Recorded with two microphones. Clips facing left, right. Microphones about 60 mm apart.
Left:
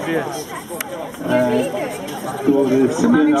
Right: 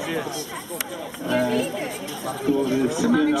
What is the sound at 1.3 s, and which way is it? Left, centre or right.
A man's voice, centre.